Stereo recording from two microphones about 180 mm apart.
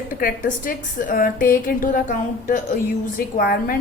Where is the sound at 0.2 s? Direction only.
50° left (ahead or behind).